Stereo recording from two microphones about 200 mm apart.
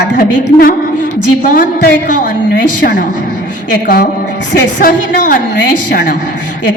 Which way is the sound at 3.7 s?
45° left (ahead or behind).